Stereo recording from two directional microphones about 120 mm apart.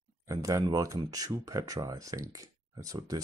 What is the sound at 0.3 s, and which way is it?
Speech, 30° right (ahead or behind).